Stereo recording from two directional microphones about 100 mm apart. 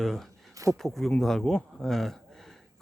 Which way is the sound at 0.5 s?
30° right (ahead or behind).